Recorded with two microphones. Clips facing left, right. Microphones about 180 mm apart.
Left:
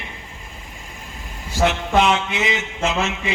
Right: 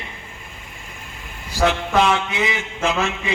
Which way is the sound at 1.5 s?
20° left (ahead or behind).